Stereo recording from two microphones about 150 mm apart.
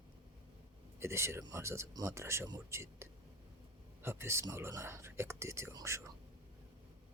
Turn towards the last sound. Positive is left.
turn(degrees=-20)  # may be behind; listen again after turning